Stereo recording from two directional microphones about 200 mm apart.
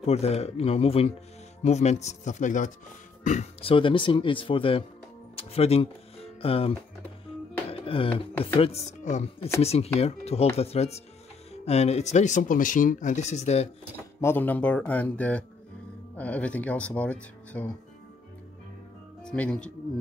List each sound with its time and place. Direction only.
0.0 s speech: 30° left (ahead or behind)
7.7 s a sound: 25° left (ahead or behind)
8.5 s speech: 30° left (ahead or behind)
14.2 s speech: 10° left (ahead or behind)
19.2 s speech: 5° left (ahead or behind)